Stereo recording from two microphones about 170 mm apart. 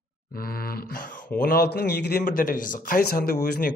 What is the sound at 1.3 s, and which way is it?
A man's voice, 55° left (ahead or behind).